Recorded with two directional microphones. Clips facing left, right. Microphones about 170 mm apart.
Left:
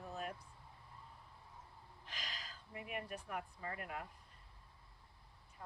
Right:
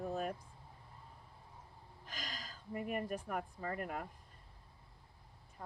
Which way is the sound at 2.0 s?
45° right (ahead or behind).